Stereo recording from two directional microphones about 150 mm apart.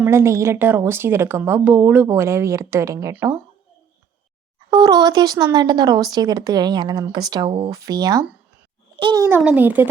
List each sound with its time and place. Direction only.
0.0 s a woman's voice: 15° right (ahead or behind)
4.7 s a child's voice: 25° right (ahead or behind)
9.2 s a woman's voice: 10° right (ahead or behind)